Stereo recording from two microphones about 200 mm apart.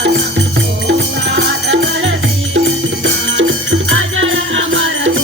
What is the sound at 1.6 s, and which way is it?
Music, 75° right (ahead or behind).